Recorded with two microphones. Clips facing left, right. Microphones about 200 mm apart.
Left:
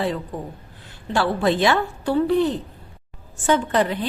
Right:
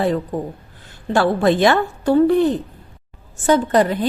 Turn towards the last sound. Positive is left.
turn(degrees=-45)  # may be behind; listen again after turning